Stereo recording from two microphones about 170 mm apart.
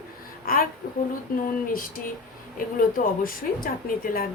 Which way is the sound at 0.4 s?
60° left (ahead or behind).